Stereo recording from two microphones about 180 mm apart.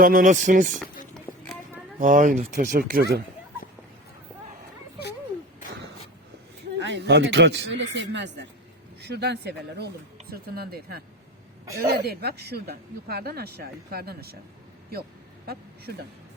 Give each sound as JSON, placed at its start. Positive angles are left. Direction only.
{"t": 0.0, "sound": "speech", "side_deg": -50}
{"t": 1.1, "sound": "music", "side_deg": 5}
{"t": 2.0, "sound": "speech", "side_deg": -45}
{"t": 6.7, "sound": "speech", "side_deg": -80}
{"t": 9.0, "sound": "speech", "side_deg": -65}